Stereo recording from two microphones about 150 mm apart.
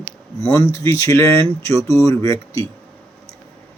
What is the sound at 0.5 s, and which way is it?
A man's voice, 20° left (ahead or behind).